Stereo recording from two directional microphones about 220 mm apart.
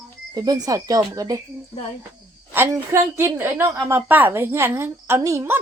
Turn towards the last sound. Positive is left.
turn(degrees=-10)  # may be behind; listen again after turning